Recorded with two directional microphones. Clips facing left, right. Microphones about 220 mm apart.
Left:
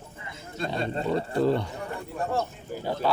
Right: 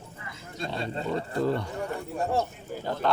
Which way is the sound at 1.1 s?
30° left (ahead or behind).